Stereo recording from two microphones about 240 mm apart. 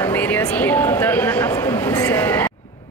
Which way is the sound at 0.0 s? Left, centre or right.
Centre.